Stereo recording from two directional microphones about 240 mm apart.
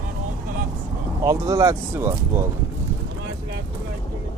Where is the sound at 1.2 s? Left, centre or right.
Centre.